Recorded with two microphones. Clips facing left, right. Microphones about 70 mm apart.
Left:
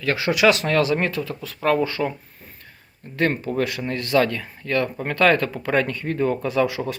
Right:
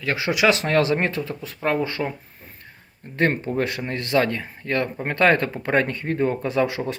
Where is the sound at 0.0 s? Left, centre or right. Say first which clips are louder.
Left 2 dB; centre.